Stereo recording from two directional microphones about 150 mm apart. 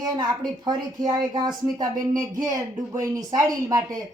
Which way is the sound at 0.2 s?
30° right (ahead or behind).